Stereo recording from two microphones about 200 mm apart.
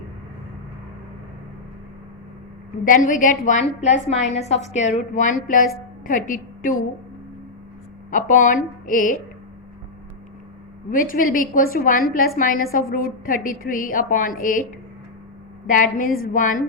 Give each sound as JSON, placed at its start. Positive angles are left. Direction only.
{"t": 3.1, "sound": "a woman's voice", "side_deg": 40}
{"t": 8.1, "sound": "a woman's voice", "side_deg": 40}
{"t": 10.9, "sound": "a woman's voice", "side_deg": 45}
{"t": 15.6, "sound": "a woman's voice", "side_deg": 40}